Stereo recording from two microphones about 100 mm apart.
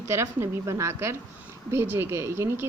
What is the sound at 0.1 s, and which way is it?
Speech, 25° right (ahead or behind).